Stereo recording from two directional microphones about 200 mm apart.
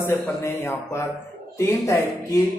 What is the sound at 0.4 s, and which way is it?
Speech, 15° left (ahead or behind).